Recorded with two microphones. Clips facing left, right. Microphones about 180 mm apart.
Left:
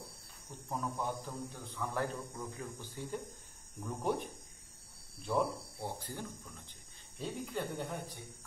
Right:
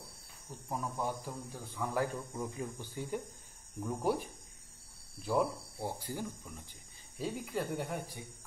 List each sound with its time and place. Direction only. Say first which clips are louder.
0.7 s a man's voice: right 1 dB; 5° right (ahead or behind)